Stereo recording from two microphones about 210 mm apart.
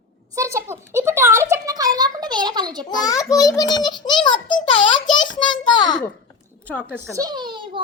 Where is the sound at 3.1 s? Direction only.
15° left (ahead or behind).